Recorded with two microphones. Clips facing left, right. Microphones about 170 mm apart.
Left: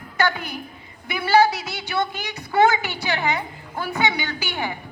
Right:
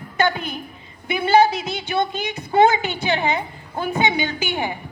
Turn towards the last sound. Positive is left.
turn(degrees=-20)  # may be behind; listen again after turning